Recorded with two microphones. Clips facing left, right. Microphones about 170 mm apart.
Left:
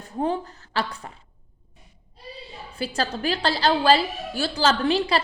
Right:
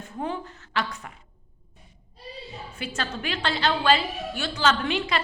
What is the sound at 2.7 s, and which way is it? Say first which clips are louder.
A woman's voice: left 6 dB; 35° left (ahead or behind).